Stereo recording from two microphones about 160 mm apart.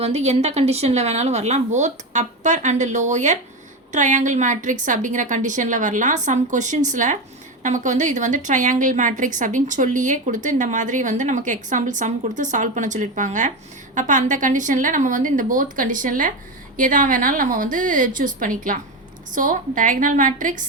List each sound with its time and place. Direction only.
0.0 s a woman's voice: 40° right (ahead or behind)